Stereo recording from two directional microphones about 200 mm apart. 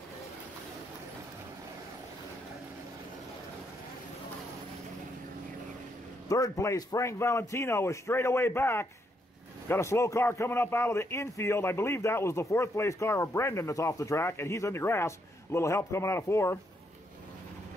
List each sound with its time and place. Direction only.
6.2 s a man's voice: 15° left (ahead or behind)